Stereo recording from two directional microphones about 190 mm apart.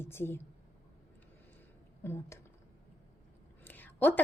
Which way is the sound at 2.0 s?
15° left (ahead or behind).